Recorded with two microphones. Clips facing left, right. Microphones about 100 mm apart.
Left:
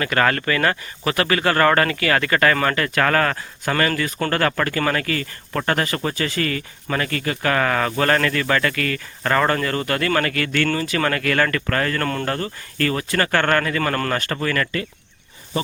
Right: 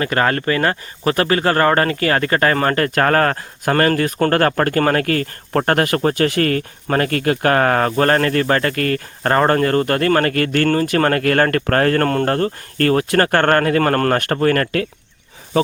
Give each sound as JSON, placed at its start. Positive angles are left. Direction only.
{"t": 0.0, "sound": "speech", "side_deg": -30}